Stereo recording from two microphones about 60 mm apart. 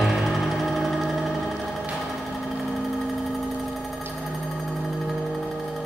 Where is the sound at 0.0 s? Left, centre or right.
Centre.